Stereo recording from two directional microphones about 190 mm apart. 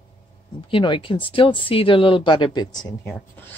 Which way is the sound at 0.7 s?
25° left (ahead or behind).